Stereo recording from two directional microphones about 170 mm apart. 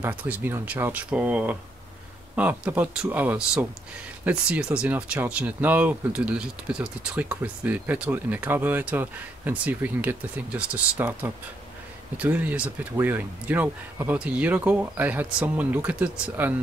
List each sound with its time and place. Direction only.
0.0 s speech: 10° right (ahead or behind)